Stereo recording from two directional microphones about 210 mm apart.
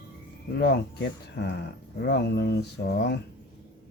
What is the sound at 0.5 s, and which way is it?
Speech, 55° left (ahead or behind).